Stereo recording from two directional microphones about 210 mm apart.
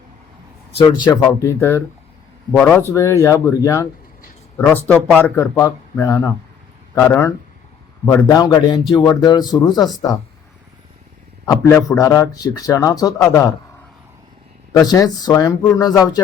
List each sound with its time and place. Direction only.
0.9 s a man's voice: 20° left (ahead or behind)
11.4 s speech: 15° left (ahead or behind)
14.7 s speech: 20° left (ahead or behind)